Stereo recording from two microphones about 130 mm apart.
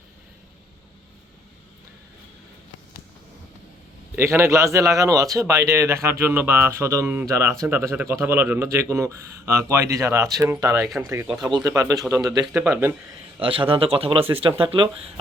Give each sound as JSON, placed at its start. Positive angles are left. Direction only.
{"t": 4.1, "sound": "a man's voice", "side_deg": -20}
{"t": 10.8, "sound": "speech", "side_deg": 0}
{"t": 11.0, "sound": "a man's voice", "side_deg": -20}
{"t": 12.5, "sound": "speech", "side_deg": -15}
{"t": 13.4, "sound": "speech", "side_deg": -45}